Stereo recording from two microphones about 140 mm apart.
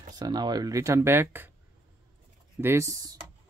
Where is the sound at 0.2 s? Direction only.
30° right (ahead or behind).